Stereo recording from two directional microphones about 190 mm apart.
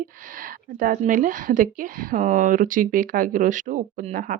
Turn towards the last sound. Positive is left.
turn(degrees=-45)  # may be behind; listen again after turning